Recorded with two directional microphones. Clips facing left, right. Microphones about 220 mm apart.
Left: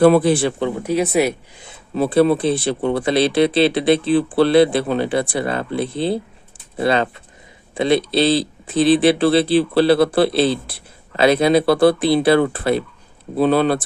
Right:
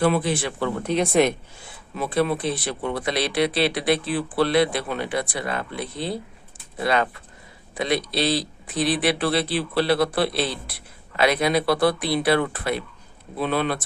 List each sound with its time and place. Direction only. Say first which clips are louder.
0.0 s speech: left 9 dB; 35° left (ahead or behind)
0.8 s speech: left 1 dB; 5° left (ahead or behind)
1.9 s speech: left 8 dB; 30° left (ahead or behind)